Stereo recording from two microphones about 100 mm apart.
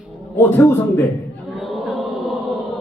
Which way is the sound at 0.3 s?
20° left (ahead or behind).